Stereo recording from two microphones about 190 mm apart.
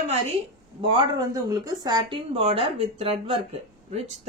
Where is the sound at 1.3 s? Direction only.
15° right (ahead or behind).